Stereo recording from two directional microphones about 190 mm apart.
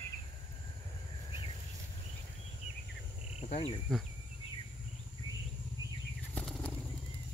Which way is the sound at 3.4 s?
35° left (ahead or behind).